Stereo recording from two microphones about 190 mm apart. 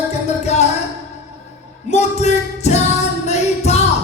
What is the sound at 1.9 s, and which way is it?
Music, 35° left (ahead or behind).